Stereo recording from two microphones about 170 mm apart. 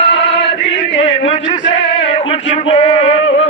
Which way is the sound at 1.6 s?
90° left.